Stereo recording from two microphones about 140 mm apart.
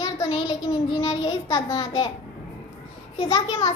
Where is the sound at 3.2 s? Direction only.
30° left (ahead or behind).